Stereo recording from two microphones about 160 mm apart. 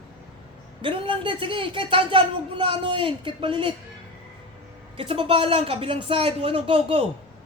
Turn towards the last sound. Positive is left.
turn(degrees=-35)  # may be behind; listen again after turning